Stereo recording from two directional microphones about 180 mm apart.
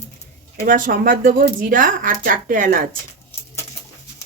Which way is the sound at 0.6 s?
55° right (ahead or behind).